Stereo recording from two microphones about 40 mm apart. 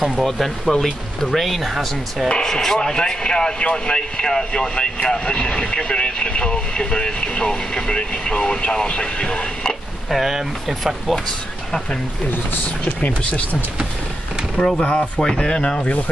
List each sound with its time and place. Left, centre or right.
0.2 s speech: centre
2.2 s speech: centre
10.0 s speech: centre
14.8 s speech: left